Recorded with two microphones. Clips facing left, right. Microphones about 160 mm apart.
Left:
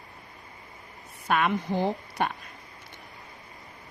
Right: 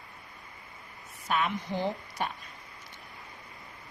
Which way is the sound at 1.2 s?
65° left (ahead or behind).